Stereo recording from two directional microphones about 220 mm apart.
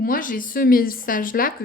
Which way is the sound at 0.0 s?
40° left (ahead or behind).